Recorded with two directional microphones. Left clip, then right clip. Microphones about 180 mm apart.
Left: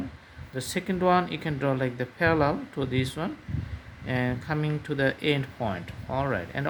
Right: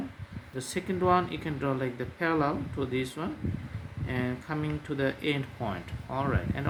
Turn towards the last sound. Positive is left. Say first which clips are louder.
# left 3 dB
turn(degrees=40)  # may be behind; listen again after turning